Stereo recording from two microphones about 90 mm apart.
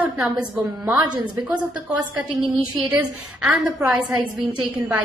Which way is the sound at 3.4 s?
15° right (ahead or behind).